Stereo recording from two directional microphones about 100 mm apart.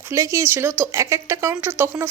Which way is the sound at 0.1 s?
25° right (ahead or behind).